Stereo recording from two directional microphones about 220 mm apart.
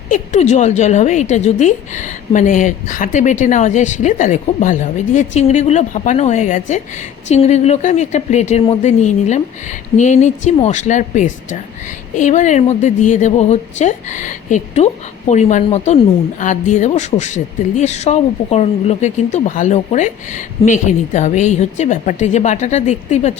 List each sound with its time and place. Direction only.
0.1 s a woman's voice: 30° left (ahead or behind)